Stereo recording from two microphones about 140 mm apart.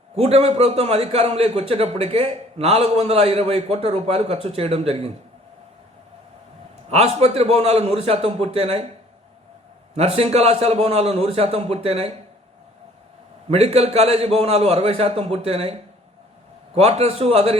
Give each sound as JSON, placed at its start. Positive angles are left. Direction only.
{"t": 0.2, "sound": "a man's voice", "side_deg": -50}
{"t": 6.9, "sound": "a man's voice", "side_deg": -50}
{"t": 9.9, "sound": "a man's voice", "side_deg": -45}
{"t": 13.5, "sound": "a man's voice", "side_deg": -45}